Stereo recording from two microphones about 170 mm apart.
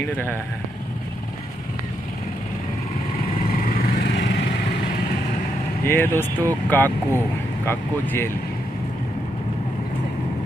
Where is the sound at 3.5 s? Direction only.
55° left (ahead or behind).